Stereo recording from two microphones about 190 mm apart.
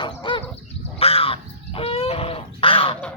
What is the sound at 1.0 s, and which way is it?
Crow, 30° left (ahead or behind).